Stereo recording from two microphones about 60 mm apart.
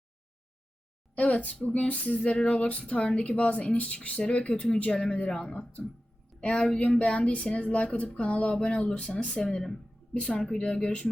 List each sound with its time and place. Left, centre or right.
1.1 s speech: left